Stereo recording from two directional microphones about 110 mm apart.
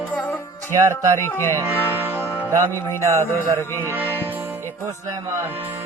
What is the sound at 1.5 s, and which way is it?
Music, 20° right (ahead or behind).